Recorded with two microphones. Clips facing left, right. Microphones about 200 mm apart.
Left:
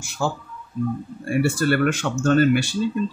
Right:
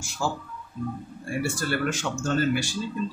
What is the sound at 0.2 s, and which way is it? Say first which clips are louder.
Speech: left 4 dB; 60° left (ahead or behind).